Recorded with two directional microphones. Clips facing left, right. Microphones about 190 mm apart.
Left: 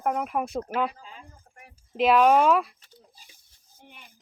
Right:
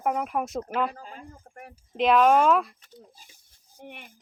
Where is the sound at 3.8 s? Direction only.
60° right (ahead or behind).